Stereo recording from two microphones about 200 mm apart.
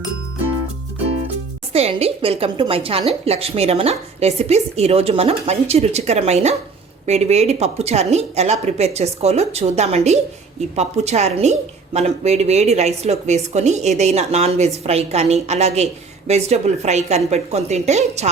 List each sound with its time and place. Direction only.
1.7 s a woman's voice: 30° right (ahead or behind)